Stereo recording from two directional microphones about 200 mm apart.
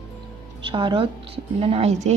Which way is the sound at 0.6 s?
25° right (ahead or behind).